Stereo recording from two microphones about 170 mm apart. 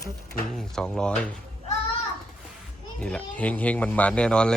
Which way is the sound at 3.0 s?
5° left (ahead or behind).